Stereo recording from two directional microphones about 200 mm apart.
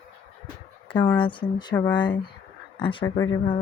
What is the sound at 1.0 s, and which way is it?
Speech, 25° left (ahead or behind).